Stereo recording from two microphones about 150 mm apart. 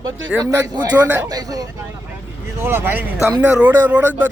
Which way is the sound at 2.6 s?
15° right (ahead or behind).